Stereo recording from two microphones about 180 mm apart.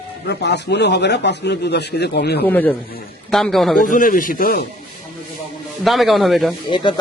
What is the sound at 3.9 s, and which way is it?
Speech, 50° left (ahead or behind).